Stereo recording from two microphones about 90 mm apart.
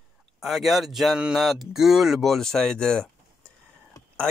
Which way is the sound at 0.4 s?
Centre (ahead or behind).